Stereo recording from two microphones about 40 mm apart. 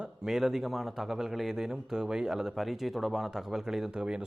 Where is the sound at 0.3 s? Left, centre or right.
Centre.